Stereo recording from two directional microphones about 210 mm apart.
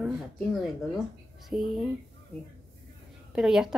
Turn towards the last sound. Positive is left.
turn(degrees=-5)  # may be behind; listen again after turning